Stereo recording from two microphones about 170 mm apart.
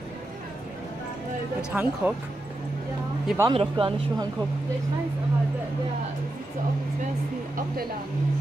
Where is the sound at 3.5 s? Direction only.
30° right (ahead or behind).